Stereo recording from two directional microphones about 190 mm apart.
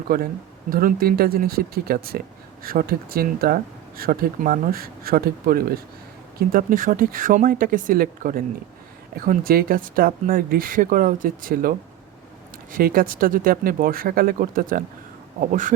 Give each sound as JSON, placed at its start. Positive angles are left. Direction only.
{"t": 0.1, "sound": "speech", "side_deg": -50}
{"t": 12.7, "sound": "speech", "side_deg": -50}